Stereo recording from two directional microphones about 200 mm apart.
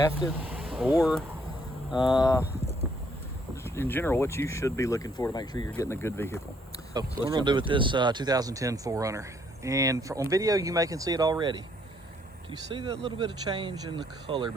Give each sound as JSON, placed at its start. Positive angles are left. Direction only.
{"t": 0.3, "sound": "a sound", "side_deg": -10}
{"t": 0.9, "sound": "speech", "side_deg": 0}
{"t": 2.0, "sound": "speech", "side_deg": 20}
{"t": 3.5, "sound": "speech", "side_deg": 10}
{"t": 6.9, "sound": "speech", "side_deg": -25}